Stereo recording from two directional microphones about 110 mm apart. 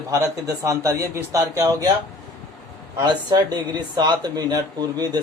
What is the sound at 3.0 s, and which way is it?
Speech, 40° right (ahead or behind).